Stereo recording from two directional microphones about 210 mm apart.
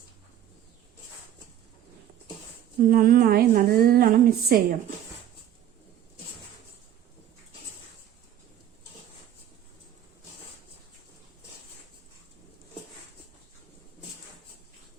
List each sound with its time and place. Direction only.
2.8 s a woman's voice: 45° right (ahead or behind)